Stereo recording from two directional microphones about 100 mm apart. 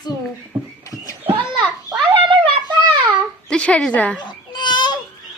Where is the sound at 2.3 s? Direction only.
55° right (ahead or behind).